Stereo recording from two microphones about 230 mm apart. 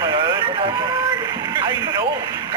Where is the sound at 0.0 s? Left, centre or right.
Centre.